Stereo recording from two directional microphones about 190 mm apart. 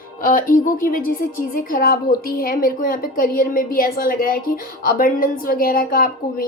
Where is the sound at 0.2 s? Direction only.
45° left (ahead or behind).